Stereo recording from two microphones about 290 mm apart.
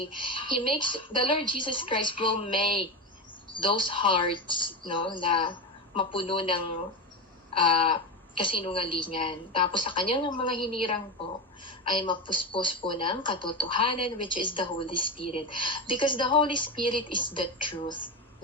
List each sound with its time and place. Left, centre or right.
0.2 s a woman's voice: centre